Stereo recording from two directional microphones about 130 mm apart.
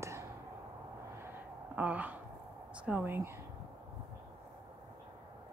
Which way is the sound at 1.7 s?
10° right (ahead or behind).